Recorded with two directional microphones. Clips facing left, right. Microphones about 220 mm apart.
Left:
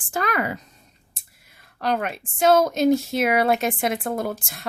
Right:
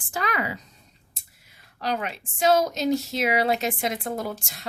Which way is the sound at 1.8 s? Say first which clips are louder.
Left 4 dB; 55° left (ahead or behind).